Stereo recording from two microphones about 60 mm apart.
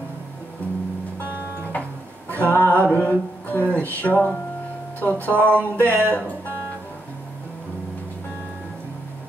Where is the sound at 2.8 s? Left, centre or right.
Left.